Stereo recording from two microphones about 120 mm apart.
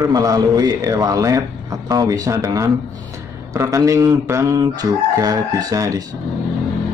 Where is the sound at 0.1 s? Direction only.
30° right (ahead or behind).